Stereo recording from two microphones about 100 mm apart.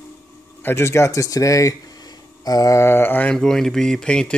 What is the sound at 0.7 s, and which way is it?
Speech, 25° left (ahead or behind).